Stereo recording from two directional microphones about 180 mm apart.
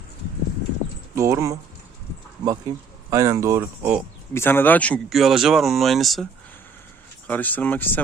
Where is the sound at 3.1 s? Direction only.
15° right (ahead or behind).